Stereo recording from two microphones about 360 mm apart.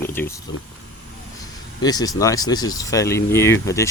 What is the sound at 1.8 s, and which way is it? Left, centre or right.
Speech, centre.